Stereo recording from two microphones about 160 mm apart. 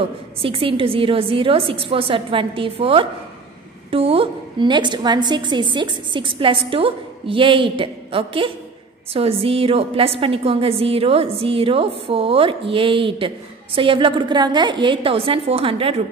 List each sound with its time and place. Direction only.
0.0 s a woman's voice: 35° right (ahead or behind)